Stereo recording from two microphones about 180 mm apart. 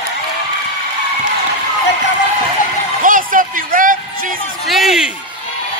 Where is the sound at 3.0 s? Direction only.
50° right (ahead or behind).